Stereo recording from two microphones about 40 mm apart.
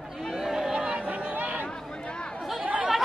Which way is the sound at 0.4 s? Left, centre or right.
Centre.